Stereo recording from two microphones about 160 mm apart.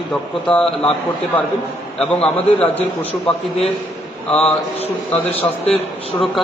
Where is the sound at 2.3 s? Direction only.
10° left (ahead or behind).